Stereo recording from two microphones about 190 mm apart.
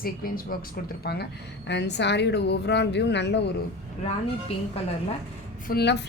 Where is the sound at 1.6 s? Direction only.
65° left (ahead or behind).